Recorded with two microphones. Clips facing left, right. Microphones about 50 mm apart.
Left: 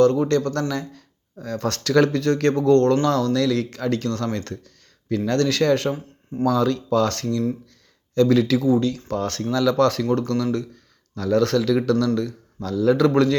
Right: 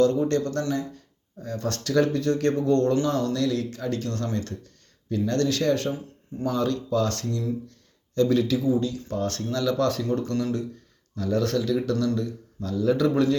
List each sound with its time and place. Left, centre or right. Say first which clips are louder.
0.0 s speech: left 4 dB; left
0.7 s speech: even; left
5.0 s speech: left 3 dB; left
6.3 s speech: left 8 dB; left
7.0 s speech: left 5 dB; left
11.1 s speech: left 5 dB; left